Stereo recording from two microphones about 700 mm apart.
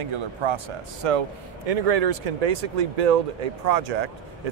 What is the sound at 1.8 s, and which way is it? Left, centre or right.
Speech, right.